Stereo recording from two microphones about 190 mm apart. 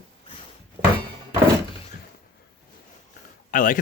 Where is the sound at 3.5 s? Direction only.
45° left (ahead or behind).